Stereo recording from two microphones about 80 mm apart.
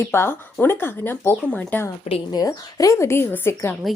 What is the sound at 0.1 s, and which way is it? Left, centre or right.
A woman's voice, left.